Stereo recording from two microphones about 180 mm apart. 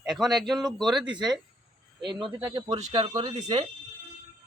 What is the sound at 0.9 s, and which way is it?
Speech, 25° right (ahead or behind).